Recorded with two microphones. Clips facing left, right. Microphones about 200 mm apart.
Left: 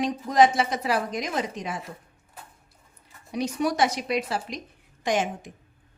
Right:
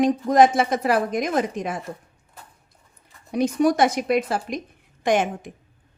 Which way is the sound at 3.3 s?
50° right (ahead or behind).